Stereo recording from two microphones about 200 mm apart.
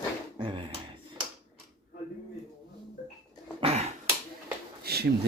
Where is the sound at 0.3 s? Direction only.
25° right (ahead or behind).